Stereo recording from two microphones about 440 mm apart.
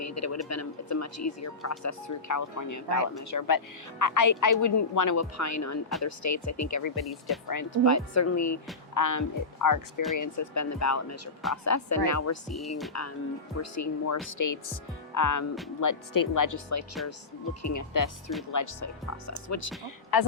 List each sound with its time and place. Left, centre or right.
0.0 s speech: left
12.5 s speech: centre
12.9 s speech: left
20.1 s speech: left